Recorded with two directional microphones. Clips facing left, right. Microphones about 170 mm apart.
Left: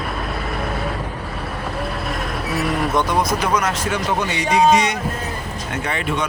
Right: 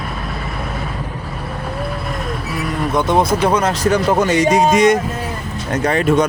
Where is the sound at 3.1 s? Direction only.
25° right (ahead or behind).